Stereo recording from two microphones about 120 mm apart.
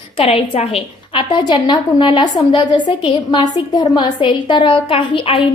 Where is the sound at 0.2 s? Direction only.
55° left (ahead or behind).